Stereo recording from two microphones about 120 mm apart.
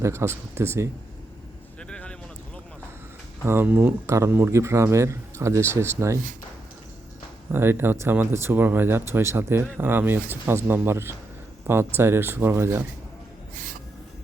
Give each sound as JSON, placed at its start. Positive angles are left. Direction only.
{"t": 0.0, "sound": "speech", "side_deg": -25}
{"t": 1.9, "sound": "a sound", "side_deg": 10}
{"t": 3.4, "sound": "speech", "side_deg": -20}
{"t": 7.5, "sound": "speech", "side_deg": -20}